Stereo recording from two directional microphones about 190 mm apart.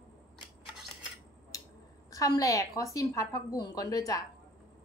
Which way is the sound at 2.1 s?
20° left (ahead or behind).